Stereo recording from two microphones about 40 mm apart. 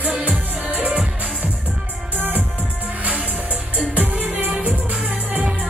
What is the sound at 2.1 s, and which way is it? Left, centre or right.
Music, right.